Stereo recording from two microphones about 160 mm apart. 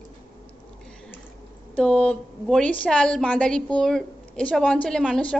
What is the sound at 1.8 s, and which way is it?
A woman's voice, 5° left (ahead or behind).